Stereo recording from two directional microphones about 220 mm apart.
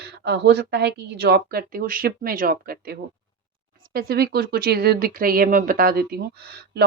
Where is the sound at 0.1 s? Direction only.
50° right (ahead or behind).